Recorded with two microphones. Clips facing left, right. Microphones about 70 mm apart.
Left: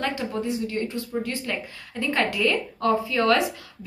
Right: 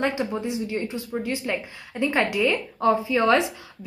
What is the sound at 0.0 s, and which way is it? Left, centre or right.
A woman's voice, centre.